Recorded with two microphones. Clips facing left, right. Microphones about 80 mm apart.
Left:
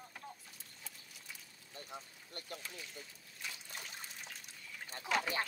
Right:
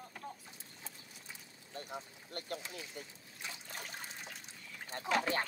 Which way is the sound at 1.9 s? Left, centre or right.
Right.